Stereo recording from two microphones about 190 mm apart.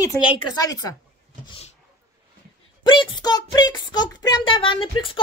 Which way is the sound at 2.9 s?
25° left (ahead or behind).